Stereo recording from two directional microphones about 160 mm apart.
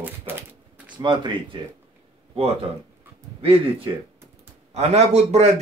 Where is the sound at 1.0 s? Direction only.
30° right (ahead or behind).